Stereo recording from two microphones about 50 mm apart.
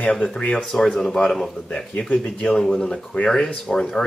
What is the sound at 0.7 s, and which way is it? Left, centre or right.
Speech, centre.